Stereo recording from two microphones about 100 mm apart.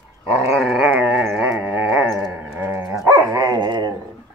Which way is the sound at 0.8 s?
15° right (ahead or behind).